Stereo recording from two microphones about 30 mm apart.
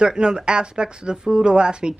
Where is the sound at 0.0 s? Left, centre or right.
Right.